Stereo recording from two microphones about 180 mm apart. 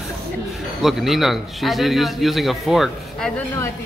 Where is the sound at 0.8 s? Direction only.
Centre (ahead or behind).